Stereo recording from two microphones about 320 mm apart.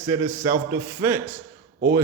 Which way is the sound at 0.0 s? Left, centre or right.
Centre.